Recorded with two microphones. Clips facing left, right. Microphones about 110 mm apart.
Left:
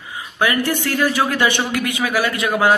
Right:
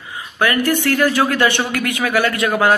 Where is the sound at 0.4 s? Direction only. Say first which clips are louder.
Right 2 dB; 15° left (ahead or behind).